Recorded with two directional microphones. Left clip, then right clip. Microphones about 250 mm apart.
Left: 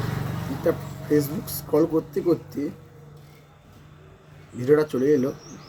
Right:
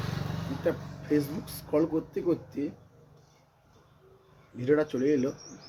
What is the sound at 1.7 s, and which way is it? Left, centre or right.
Speech, centre.